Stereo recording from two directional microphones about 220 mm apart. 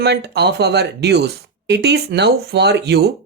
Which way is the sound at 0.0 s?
50° right (ahead or behind).